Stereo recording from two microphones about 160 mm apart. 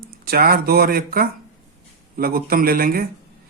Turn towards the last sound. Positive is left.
turn(degrees=-65)  # may be behind; listen again after turning